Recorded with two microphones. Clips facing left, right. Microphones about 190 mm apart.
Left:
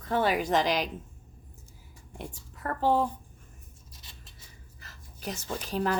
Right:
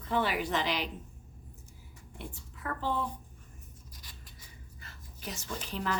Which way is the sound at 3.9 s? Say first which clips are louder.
Even; 25° left (ahead or behind).